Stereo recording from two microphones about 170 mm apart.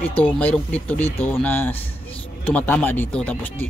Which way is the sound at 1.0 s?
35° left (ahead or behind).